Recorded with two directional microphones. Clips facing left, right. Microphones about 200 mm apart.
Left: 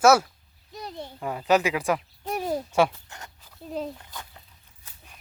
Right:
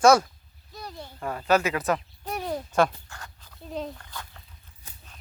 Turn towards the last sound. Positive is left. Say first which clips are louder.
# left 2 dB
turn(degrees=5)  # may be behind; listen again after turning